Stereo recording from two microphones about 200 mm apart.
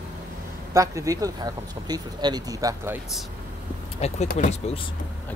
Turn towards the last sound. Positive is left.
turn(degrees=35)  # may be behind; listen again after turning